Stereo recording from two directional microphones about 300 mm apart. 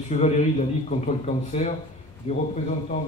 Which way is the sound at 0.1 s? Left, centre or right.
Left.